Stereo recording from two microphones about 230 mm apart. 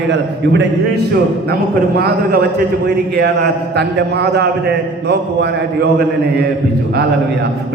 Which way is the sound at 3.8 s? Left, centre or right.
Right.